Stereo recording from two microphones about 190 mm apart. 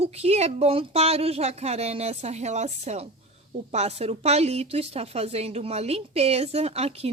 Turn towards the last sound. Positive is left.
turn(degrees=-30)  # may be behind; listen again after turning